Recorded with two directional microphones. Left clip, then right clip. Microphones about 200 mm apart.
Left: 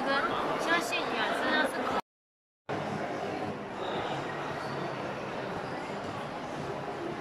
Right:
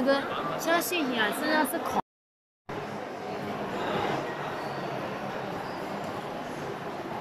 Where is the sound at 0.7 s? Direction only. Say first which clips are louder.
Right 5 dB; 35° right (ahead or behind).